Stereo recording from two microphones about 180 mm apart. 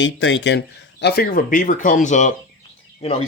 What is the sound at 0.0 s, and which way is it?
Speech, 90° left.